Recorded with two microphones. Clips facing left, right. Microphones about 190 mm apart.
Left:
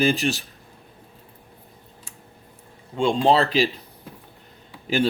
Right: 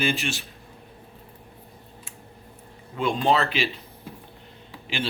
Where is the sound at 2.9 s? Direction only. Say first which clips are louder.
Left 4 dB; 30° left (ahead or behind).